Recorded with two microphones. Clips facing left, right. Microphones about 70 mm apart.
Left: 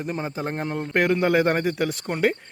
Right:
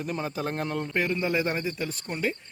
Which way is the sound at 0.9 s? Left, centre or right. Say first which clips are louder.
Left 8 dB; left.